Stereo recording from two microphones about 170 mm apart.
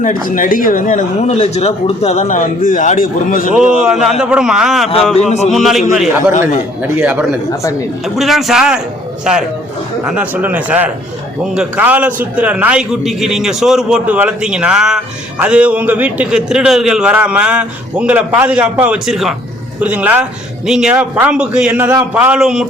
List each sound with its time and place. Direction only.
0.0 s speech: 50° left (ahead or behind)
3.6 s speech: 5° right (ahead or behind)
5.1 s speech: 40° left (ahead or behind)
5.5 s speech: centre (ahead or behind)
6.8 s a man's voice: 10° right (ahead or behind)